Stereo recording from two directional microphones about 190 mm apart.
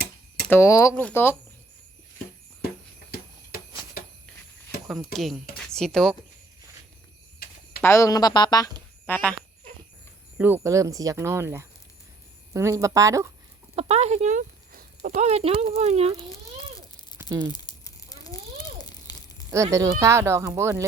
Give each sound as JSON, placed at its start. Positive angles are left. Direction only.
{"t": 0.4, "sound": "speech", "side_deg": 15}
{"t": 5.1, "sound": "speech", "side_deg": 0}
{"t": 5.5, "sound": "a sound", "side_deg": 5}
{"t": 7.8, "sound": "speech", "side_deg": 15}
{"t": 9.0, "sound": "speech", "side_deg": 10}
{"t": 10.3, "sound": "speech", "side_deg": -10}
{"t": 13.7, "sound": "speech", "side_deg": -35}
{"t": 15.2, "sound": "speech", "side_deg": -35}
{"t": 17.2, "sound": "crumpling", "side_deg": -10}
{"t": 17.5, "sound": "crumpling", "side_deg": 20}
{"t": 18.8, "sound": "a sound", "side_deg": 20}
{"t": 19.5, "sound": "speech", "side_deg": -15}